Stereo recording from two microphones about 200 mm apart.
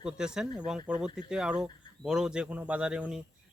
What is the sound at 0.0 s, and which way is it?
Speech, 5° right (ahead or behind).